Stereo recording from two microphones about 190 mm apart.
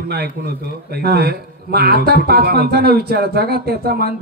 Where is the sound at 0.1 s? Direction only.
55° right (ahead or behind).